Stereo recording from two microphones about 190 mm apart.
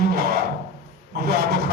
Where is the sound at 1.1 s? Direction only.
55° right (ahead or behind).